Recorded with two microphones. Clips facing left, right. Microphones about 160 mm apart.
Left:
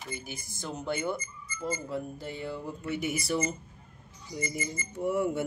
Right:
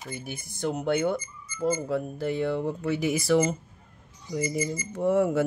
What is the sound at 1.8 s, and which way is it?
Speech, 80° right.